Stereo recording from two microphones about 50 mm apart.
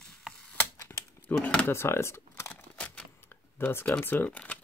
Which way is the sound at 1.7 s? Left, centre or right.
Left.